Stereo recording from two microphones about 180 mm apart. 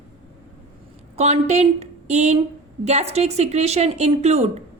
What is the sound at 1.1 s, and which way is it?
Speech, 35° right (ahead or behind).